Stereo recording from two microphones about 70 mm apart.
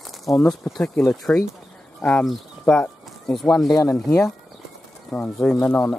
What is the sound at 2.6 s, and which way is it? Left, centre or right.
Speech, centre.